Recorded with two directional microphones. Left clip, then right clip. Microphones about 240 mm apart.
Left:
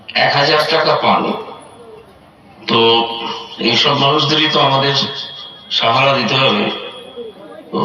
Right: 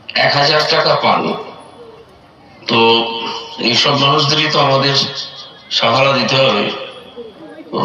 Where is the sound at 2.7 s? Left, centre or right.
Right.